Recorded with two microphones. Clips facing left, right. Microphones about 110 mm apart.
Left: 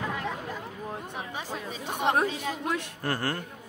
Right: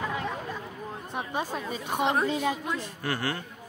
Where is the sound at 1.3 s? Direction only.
50° right (ahead or behind).